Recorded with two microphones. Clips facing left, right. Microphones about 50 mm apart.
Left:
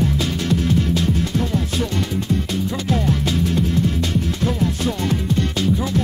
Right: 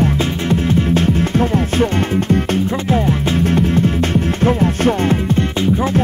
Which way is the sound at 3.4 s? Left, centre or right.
Right.